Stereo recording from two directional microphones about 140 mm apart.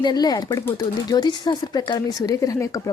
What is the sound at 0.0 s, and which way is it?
Speech, 30° left (ahead or behind).